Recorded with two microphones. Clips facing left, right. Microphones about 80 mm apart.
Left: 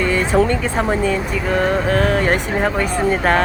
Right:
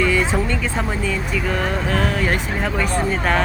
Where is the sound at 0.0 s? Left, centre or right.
Left.